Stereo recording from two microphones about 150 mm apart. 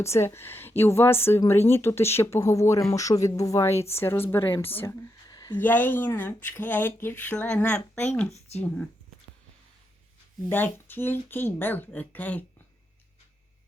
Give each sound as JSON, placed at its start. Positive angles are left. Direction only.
{"t": 0.0, "sound": "speech", "side_deg": 20}
{"t": 5.3, "sound": "a sound", "side_deg": 25}
{"t": 5.5, "sound": "speech", "side_deg": 15}
{"t": 10.5, "sound": "speech", "side_deg": 15}